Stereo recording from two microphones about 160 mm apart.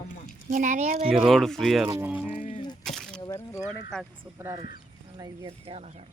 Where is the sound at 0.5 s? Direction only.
50° right (ahead or behind).